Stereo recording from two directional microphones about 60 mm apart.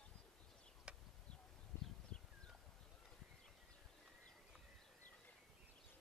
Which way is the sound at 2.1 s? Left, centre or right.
Centre.